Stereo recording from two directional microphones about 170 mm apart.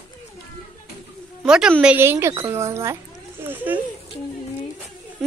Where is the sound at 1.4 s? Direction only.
5° right (ahead or behind).